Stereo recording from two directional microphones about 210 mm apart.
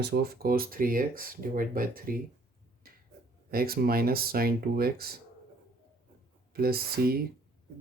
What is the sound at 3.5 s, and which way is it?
Speech, 45° right (ahead or behind).